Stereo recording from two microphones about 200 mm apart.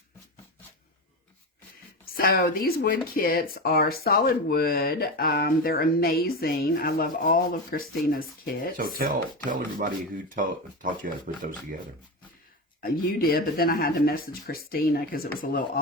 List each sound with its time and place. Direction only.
2.1 s speech: 50° left (ahead or behind)
8.7 s speech: 45° right (ahead or behind)
12.8 s speech: 50° left (ahead or behind)